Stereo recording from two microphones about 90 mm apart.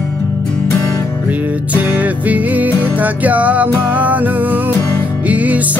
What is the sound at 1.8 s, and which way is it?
Music, 15° right (ahead or behind).